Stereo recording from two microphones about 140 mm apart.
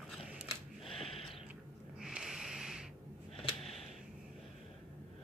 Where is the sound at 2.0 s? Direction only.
5° right (ahead or behind).